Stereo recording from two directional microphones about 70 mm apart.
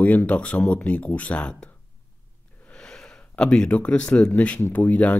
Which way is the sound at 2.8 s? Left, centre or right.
Centre.